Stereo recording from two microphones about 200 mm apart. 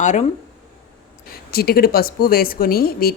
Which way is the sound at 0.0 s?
35° left (ahead or behind).